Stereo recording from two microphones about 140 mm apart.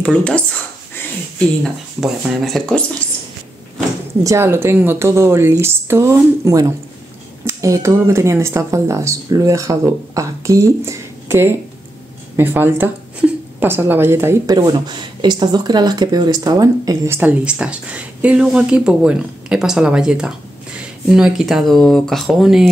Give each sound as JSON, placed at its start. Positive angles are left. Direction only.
{"t": 0.0, "sound": "speech", "side_deg": 10}
{"t": 1.6, "sound": "speech", "side_deg": 0}
{"t": 4.2, "sound": "speech", "side_deg": -20}